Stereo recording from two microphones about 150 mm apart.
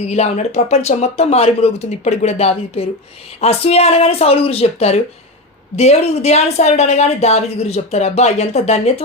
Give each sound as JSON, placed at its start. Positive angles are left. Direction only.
{"t": 0.1, "sound": "speech", "side_deg": 45}